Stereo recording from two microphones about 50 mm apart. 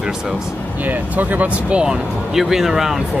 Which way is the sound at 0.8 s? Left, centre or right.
Right.